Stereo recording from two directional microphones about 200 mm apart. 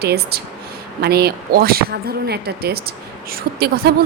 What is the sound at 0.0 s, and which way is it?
Speech, 50° right (ahead or behind).